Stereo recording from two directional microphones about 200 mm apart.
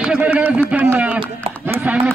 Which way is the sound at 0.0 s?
5° right (ahead or behind).